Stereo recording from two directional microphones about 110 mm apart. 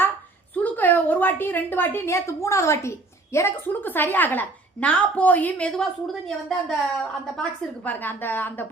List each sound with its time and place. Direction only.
0.5 s a woman's voice: 15° left (ahead or behind)
7.9 s a woman's voice: 15° left (ahead or behind)